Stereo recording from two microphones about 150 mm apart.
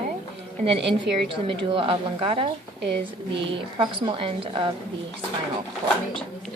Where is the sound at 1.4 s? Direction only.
35° right (ahead or behind).